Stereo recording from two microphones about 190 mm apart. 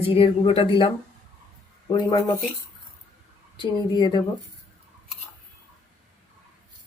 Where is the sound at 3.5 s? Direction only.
25° left (ahead or behind).